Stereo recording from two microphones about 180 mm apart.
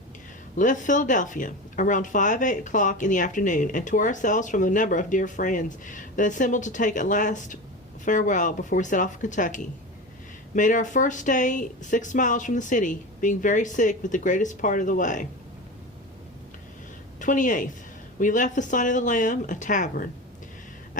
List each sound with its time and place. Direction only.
0.5 s speech: 45° left (ahead or behind)
17.2 s a woman's voice: 45° left (ahead or behind)